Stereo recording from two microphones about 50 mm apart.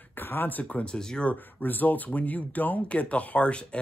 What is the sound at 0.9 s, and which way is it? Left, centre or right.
Speech, centre.